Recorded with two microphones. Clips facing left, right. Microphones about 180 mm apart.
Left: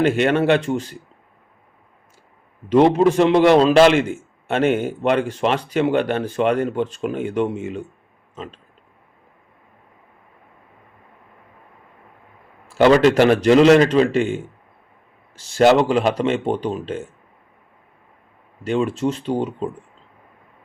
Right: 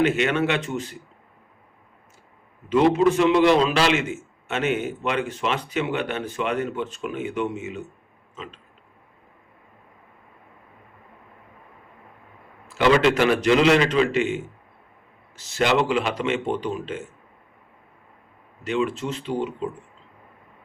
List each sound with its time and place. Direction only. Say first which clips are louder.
0.2 s a man's voice: left 5 dB; 50° left (ahead or behind)
0.4 s speech: left 7 dB; 35° left (ahead or behind)
2.7 s speech: left 4 dB; 35° left (ahead or behind)
3.8 s a man's voice: left 7 dB; 55° left (ahead or behind)
4.8 s speech: left 6 dB; 35° left (ahead or behind)
12.8 s a man's voice: left 5 dB; 40° left (ahead or behind)
15.5 s speech: left 7 dB; 40° left (ahead or behind)
18.7 s a man's voice: left 4 dB; 50° left (ahead or behind)